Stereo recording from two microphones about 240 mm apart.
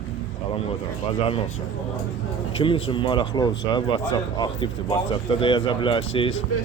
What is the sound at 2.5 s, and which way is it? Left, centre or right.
Speech, left.